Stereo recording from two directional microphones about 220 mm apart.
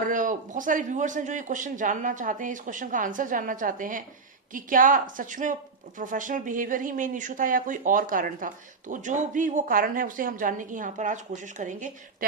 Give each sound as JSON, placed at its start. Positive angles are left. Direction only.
{"t": 0.0, "sound": "speech", "side_deg": -35}